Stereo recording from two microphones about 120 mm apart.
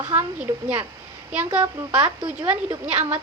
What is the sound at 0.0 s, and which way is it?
Speech, 15° right (ahead or behind).